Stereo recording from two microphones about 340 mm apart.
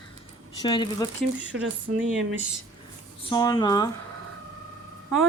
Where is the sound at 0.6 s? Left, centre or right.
Centre.